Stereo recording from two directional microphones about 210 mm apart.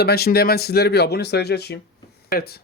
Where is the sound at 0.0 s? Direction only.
50° left (ahead or behind).